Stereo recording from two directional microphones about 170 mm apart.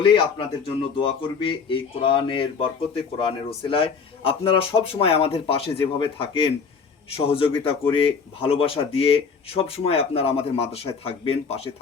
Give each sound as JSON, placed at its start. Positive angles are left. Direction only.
{"t": 0.0, "sound": "speech", "side_deg": 30}
{"t": 3.6, "sound": "speech", "side_deg": 30}